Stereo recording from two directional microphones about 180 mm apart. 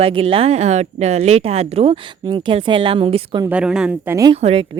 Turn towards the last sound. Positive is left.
turn(degrees=-35)  # may be behind; listen again after turning